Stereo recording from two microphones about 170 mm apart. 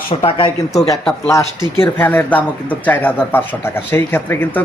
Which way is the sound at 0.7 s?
20° left (ahead or behind).